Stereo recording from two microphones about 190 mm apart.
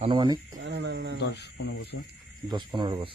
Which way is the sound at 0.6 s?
65° right (ahead or behind).